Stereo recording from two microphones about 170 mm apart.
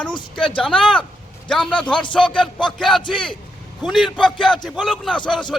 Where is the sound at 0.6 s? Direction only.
5° left (ahead or behind).